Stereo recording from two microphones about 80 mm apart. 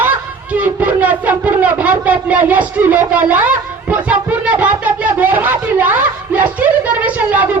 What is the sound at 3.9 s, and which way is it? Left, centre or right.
Speech, centre.